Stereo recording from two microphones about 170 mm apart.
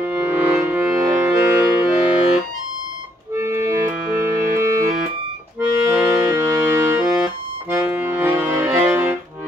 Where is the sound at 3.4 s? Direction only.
15° right (ahead or behind).